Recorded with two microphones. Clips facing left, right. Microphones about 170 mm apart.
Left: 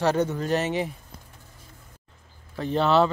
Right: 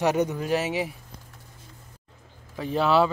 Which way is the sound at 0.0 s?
15° right (ahead or behind).